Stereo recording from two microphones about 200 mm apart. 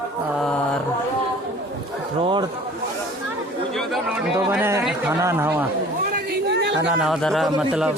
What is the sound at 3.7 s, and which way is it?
Speech, centre (ahead or behind).